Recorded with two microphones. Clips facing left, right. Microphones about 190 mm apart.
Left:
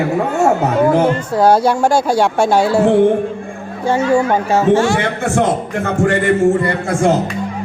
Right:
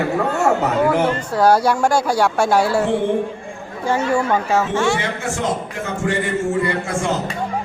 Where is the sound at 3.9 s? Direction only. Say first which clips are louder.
Left 4 dB; 30° left (ahead or behind).